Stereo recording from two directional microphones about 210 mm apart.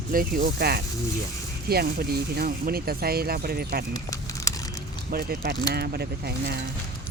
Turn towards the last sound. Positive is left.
turn(degrees=-50)  # may be behind; listen again after turning